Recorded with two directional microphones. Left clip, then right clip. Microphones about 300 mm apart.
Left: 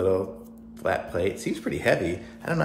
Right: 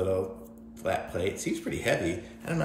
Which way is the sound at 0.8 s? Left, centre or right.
Centre.